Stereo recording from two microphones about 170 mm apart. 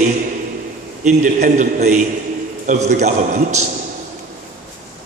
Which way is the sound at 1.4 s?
45° right (ahead or behind).